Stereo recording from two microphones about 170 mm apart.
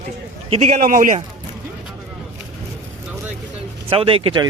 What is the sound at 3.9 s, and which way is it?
Speech, 30° right (ahead or behind).